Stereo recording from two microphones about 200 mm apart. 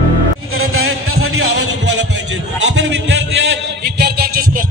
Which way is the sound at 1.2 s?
55° right (ahead or behind).